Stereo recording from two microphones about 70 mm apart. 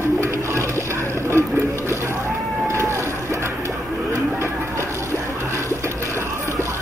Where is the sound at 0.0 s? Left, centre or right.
Right.